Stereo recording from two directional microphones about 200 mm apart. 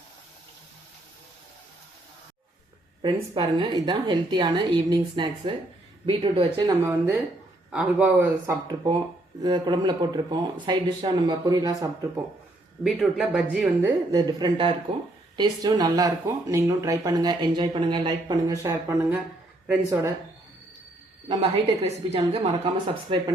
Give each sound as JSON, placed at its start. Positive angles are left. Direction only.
{"t": 3.0, "sound": "speech", "side_deg": -20}
{"t": 6.8, "sound": "speech", "side_deg": -15}
{"t": 8.6, "sound": "speech", "side_deg": -25}
{"t": 12.8, "sound": "speech", "side_deg": 0}
{"t": 13.8, "sound": "speech", "side_deg": -20}
{"t": 21.4, "sound": "a woman's voice", "side_deg": -30}